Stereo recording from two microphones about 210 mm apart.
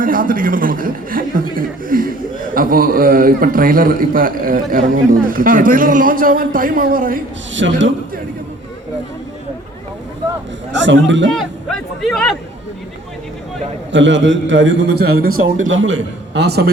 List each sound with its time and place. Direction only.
0.0 s a man's voice: 40° right (ahead or behind)
7.5 s a man's voice: 60° right (ahead or behind)
10.7 s a man's voice: 60° right (ahead or behind)
11.3 s speech: centre (ahead or behind)
13.9 s a man's voice: 60° right (ahead or behind)
15.6 s a man's voice: 65° right (ahead or behind); by 16.7 s 50° right (ahead or behind)